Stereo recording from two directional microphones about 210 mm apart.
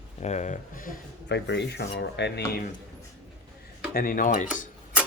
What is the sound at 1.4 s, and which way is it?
Dishes, 55° left (ahead or behind).